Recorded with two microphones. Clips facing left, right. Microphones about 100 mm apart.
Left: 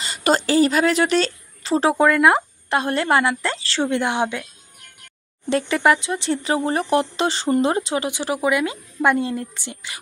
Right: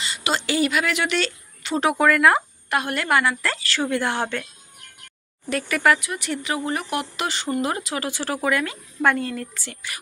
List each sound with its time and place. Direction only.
0.0 s speech: 40° left (ahead or behind); by 4.4 s 15° left (ahead or behind)
5.5 s speech: 25° left (ahead or behind)